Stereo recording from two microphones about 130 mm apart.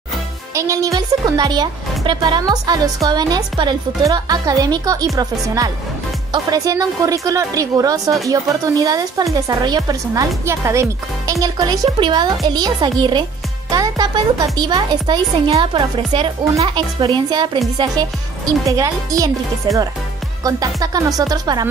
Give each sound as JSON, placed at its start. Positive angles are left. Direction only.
{"t": 0.6, "sound": "speech", "side_deg": -25}